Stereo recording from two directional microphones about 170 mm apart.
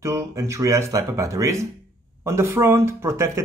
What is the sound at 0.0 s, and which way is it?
Speech, 15° right (ahead or behind).